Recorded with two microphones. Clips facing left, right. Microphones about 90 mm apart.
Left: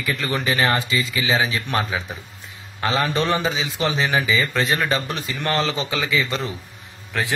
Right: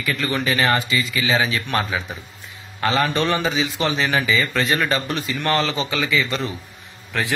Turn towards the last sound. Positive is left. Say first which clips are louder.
# right 1 dB
turn(degrees=15)  # may be behind; listen again after turning